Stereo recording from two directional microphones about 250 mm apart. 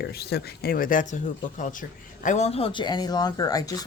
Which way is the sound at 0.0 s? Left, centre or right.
Left.